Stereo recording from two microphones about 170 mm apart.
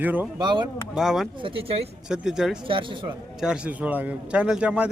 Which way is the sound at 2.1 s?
5° right (ahead or behind).